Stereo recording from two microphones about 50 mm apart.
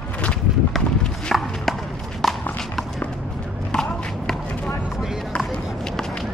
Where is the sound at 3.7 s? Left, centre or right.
Centre.